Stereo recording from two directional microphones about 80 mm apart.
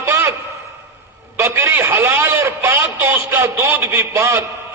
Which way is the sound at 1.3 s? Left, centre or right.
Right.